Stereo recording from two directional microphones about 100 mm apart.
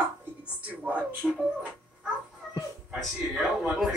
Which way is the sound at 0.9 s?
15° right (ahead or behind).